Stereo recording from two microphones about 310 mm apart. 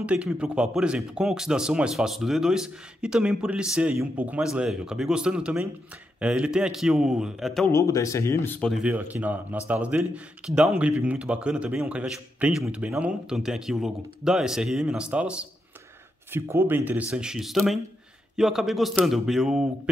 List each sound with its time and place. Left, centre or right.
0.0 s a man's voice: centre